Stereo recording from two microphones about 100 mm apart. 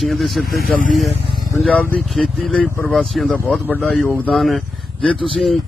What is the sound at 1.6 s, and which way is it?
Speech, 15° left (ahead or behind).